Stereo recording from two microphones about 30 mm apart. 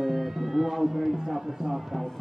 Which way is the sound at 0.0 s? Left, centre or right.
Centre.